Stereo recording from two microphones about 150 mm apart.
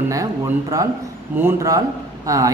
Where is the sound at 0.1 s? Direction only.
20° right (ahead or behind).